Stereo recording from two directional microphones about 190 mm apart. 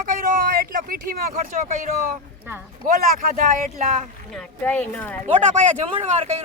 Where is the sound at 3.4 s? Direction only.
45° right (ahead or behind).